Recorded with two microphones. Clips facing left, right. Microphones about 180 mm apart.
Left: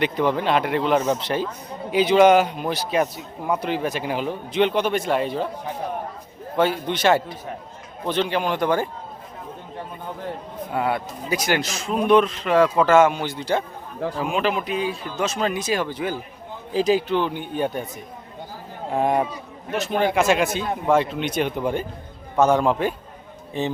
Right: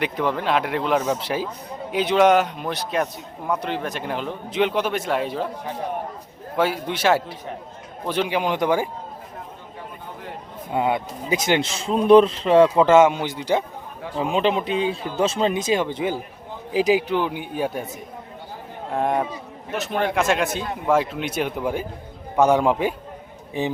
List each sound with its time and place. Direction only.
0.0 s a man's voice: centre (ahead or behind)
6.6 s a man's voice: 5° right (ahead or behind)
10.7 s a man's voice: 20° right (ahead or behind)
14.2 s a man's voice: 25° right (ahead or behind); by 17.8 s 5° right (ahead or behind)
18.9 s a man's voice: centre (ahead or behind)